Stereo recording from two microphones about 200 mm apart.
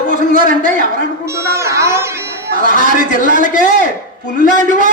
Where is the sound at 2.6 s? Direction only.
45° right (ahead or behind).